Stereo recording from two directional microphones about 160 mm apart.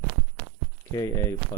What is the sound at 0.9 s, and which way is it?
Speech, 20° left (ahead or behind).